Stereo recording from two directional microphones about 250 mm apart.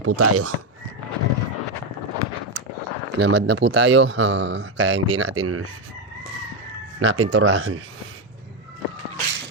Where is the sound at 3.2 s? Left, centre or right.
Right.